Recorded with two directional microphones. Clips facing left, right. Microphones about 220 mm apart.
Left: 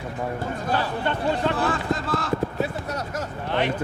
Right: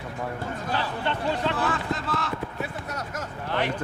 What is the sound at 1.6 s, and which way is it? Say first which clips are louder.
Run: left 3 dB; 45° left (ahead or behind).